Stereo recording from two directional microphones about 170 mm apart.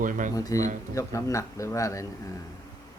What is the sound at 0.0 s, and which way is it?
Speech, 50° right (ahead or behind).